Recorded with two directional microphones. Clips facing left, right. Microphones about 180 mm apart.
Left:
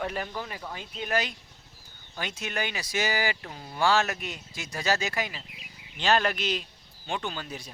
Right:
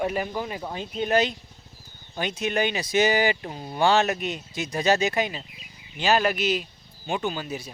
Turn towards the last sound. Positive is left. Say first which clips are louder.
# right 6 dB
turn(degrees=-10)  # may be behind; listen again after turning